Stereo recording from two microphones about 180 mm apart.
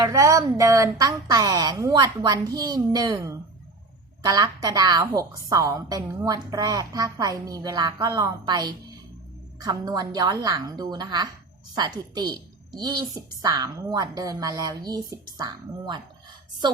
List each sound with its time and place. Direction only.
0.0 s a woman's voice: 20° right (ahead or behind)